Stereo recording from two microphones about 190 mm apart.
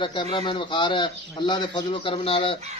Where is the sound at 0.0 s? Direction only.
25° left (ahead or behind).